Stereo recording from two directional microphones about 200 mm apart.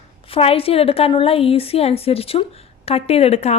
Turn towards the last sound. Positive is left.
turn(degrees=30)  # may be behind; listen again after turning